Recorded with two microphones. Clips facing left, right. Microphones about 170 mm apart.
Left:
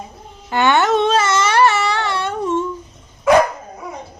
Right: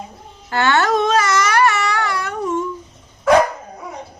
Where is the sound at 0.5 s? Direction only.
20° left (ahead or behind).